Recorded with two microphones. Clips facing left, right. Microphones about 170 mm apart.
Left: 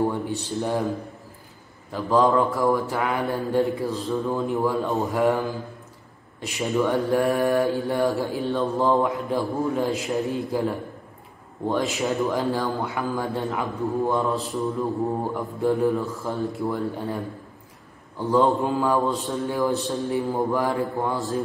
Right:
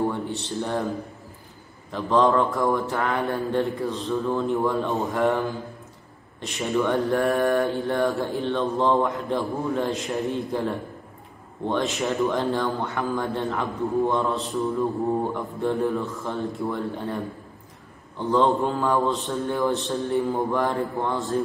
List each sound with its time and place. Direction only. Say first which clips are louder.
0.1 s a man's voice: left 1 dB; 10° left (ahead or behind)
1.9 s a man's voice: even; 5° left (ahead or behind)
6.6 s a man's voice: even; 5° left (ahead or behind)
18.2 s a man's voice: left 1 dB; 10° left (ahead or behind)